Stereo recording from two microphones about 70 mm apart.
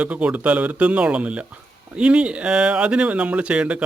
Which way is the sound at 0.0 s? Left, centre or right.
Centre.